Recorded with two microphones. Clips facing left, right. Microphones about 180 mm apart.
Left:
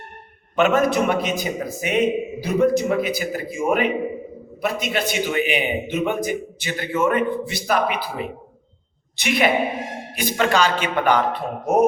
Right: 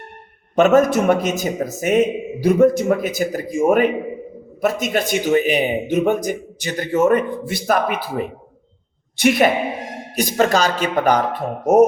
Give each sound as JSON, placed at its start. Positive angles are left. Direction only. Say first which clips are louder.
{"t": 0.5, "sound": "a man's voice", "louder": "right 4 dB", "side_deg": -45}